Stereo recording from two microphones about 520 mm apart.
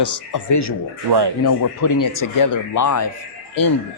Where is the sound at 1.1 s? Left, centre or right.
Right.